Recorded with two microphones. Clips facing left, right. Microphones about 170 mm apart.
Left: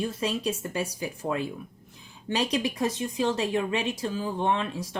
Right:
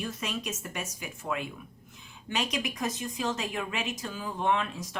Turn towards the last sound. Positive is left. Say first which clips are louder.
# left 1 dB
turn(degrees=30)  # may be behind; listen again after turning